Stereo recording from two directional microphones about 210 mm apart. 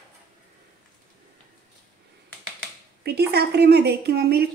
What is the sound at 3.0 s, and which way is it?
A woman's voice, 50° right (ahead or behind).